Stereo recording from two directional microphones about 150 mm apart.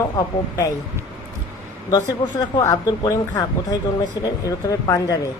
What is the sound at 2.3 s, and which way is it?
Speech, 25° left (ahead or behind).